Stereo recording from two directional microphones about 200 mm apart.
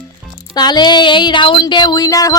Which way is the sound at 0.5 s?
20° left (ahead or behind).